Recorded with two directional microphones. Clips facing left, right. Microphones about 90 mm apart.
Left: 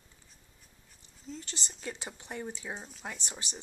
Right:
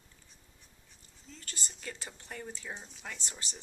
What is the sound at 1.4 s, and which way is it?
Speech, 20° left (ahead or behind).